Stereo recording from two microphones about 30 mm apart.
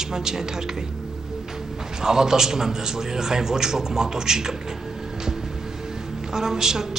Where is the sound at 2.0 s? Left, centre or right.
Centre.